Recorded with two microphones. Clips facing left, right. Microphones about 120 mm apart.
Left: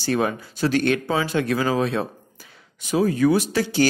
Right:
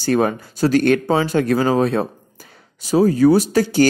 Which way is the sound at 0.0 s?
45° right (ahead or behind).